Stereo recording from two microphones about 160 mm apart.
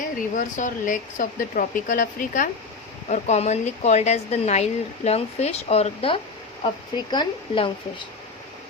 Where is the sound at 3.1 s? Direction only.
45° left (ahead or behind).